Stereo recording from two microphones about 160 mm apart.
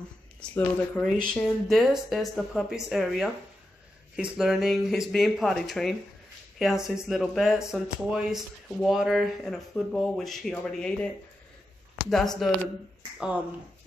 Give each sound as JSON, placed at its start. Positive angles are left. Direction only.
{"t": 0.4, "sound": "speech", "side_deg": 10}
{"t": 1.0, "sound": "speech", "side_deg": -60}
{"t": 1.3, "sound": "speech", "side_deg": 0}
{"t": 12.1, "sound": "speech", "side_deg": 0}